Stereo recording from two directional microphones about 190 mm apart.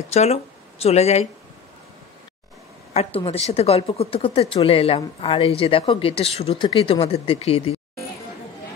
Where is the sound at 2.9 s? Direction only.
30° left (ahead or behind).